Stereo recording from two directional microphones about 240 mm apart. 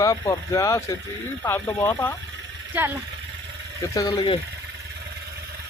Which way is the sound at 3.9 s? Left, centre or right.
Centre.